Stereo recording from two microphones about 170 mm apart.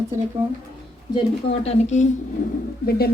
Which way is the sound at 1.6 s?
40° left (ahead or behind).